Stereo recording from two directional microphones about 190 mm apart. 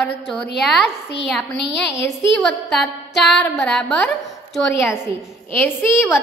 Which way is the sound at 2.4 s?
Centre (ahead or behind).